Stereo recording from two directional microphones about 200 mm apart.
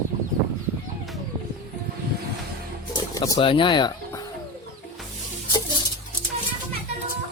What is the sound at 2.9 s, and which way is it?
Speech, 20° left (ahead or behind).